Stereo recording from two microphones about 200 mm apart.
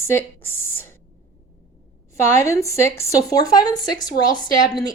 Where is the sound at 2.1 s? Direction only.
15° left (ahead or behind).